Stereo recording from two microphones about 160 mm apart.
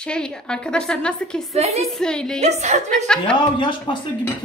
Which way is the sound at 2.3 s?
45° right (ahead or behind).